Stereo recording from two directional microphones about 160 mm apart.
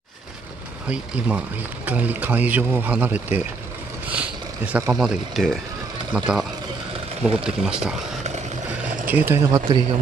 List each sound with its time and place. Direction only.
0.8 s speech: 10° right (ahead or behind)
7.4 s speech: 5° right (ahead or behind)
9.0 s speech: 10° right (ahead or behind); by 9.9 s 30° right (ahead or behind)